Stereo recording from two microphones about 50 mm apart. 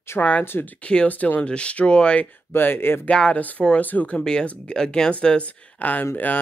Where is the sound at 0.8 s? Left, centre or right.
Left.